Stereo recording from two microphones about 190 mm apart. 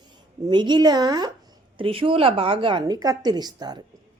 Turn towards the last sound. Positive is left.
turn(degrees=-20)  # may be behind; listen again after turning